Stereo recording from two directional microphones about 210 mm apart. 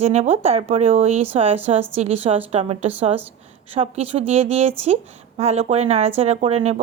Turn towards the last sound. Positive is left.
turn(degrees=-30)  # may be behind; listen again after turning